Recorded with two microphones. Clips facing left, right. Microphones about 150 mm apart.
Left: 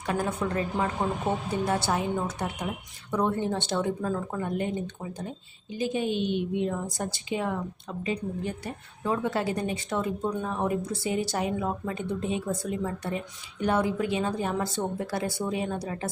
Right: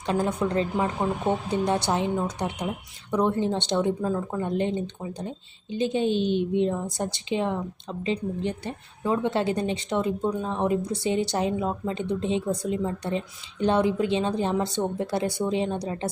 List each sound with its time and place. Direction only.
0.0 s a woman's voice: 20° right (ahead or behind)